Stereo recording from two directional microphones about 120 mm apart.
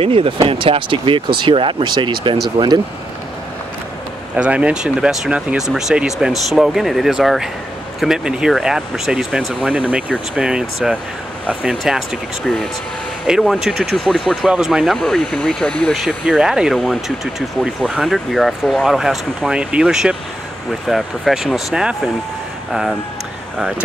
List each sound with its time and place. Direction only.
0.0 s speech: 50° right (ahead or behind)
4.4 s speech: 10° right (ahead or behind); by 15.9 s 10° left (ahead or behind)
15.9 s speech: 5° right (ahead or behind)